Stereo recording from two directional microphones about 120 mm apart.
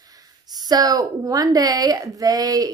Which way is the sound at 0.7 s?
35° right (ahead or behind).